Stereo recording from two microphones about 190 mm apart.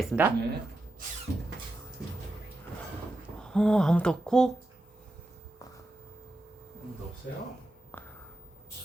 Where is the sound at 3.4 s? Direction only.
5° left (ahead or behind).